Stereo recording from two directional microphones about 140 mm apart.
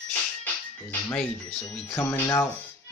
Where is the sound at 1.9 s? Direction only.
20° left (ahead or behind).